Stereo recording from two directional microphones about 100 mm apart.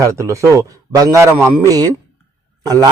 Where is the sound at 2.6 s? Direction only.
40° right (ahead or behind).